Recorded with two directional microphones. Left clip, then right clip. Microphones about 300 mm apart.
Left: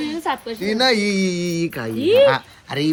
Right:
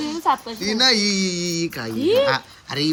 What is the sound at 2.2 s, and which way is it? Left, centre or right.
Speech, centre.